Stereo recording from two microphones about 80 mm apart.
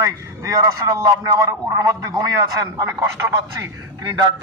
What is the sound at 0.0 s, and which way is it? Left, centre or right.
A man's voice, right.